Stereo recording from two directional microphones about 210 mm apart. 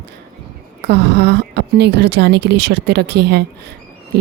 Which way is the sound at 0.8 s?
55° right (ahead or behind).